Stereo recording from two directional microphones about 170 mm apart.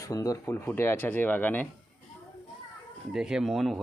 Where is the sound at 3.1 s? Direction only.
5° right (ahead or behind).